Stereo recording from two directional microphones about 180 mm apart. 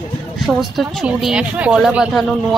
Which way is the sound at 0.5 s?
Centre (ahead or behind).